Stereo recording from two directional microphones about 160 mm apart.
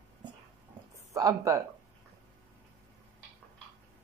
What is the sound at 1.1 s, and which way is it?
Speech, 20° right (ahead or behind).